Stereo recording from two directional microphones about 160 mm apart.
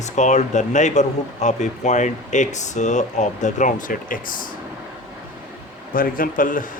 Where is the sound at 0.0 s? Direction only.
50° left (ahead or behind).